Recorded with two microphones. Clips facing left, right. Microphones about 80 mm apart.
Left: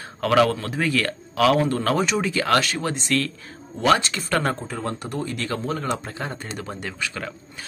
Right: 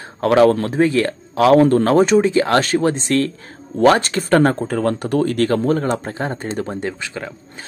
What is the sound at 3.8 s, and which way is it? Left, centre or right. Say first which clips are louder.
Speech: right 6 dB; right.